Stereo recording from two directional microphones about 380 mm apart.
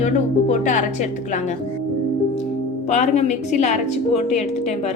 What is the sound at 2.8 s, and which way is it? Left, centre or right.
A woman's voice, centre.